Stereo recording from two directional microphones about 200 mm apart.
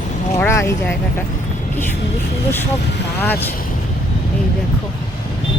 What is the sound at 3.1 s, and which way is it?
Speech, 10° left (ahead or behind).